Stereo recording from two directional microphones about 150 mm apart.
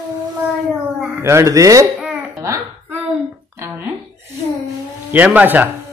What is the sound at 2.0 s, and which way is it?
Babbling, 10° right (ahead or behind).